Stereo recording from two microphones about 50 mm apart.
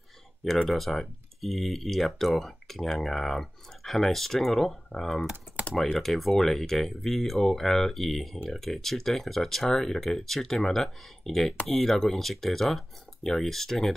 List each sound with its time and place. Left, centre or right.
0.7 s speech: centre